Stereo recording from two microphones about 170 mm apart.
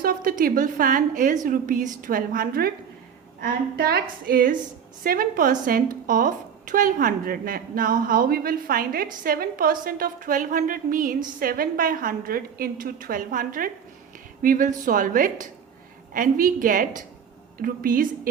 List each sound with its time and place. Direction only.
0.0 s a woman's voice: 60° right (ahead or behind)